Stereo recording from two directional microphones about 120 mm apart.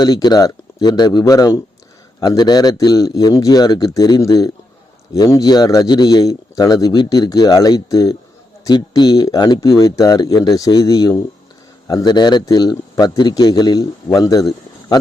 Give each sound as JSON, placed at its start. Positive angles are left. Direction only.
{"t": 0.0, "sound": "a man's voice", "side_deg": 35}